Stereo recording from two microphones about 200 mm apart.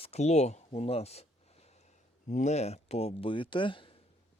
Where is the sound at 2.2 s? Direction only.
35° left (ahead or behind).